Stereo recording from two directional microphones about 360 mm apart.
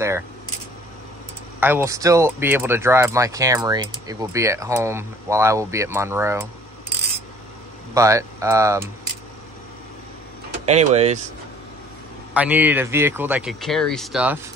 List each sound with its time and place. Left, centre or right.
1.6 s speech: centre
7.9 s speech: centre
10.7 s speech: centre
12.4 s speech: centre